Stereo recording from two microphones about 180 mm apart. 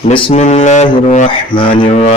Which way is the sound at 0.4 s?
40° left (ahead or behind).